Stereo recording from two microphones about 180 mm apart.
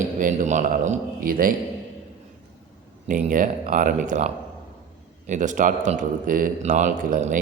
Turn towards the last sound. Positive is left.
turn(degrees=-45)  # may be behind; listen again after turning